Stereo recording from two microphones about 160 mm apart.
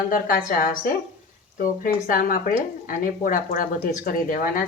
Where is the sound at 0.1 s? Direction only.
60° left (ahead or behind).